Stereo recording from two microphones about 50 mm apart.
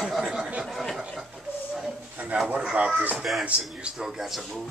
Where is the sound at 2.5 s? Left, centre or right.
Right.